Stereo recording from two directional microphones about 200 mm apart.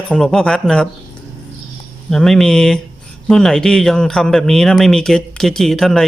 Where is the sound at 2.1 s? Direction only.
Centre (ahead or behind).